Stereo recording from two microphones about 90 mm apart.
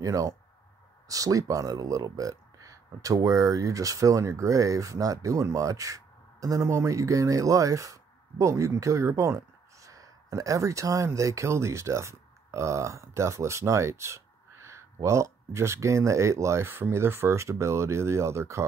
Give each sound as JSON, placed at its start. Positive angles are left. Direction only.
{"t": 0.0, "sound": "speech", "side_deg": -40}